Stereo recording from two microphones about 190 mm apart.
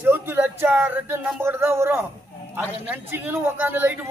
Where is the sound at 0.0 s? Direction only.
10° right (ahead or behind).